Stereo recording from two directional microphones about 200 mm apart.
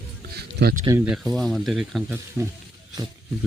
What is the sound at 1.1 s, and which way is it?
Speech, centre (ahead or behind).